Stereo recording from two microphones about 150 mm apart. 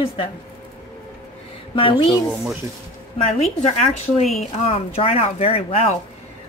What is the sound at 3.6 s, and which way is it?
Speech, 50° left (ahead or behind).